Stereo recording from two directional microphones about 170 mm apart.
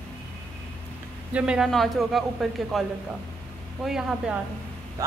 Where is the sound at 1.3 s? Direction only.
5° right (ahead or behind).